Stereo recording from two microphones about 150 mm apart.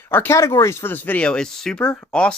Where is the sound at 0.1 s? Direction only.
15° left (ahead or behind).